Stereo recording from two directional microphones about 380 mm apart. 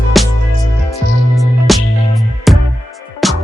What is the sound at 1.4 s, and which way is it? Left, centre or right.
Music, centre.